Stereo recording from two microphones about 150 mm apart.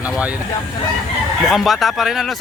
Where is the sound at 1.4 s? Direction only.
Centre (ahead or behind).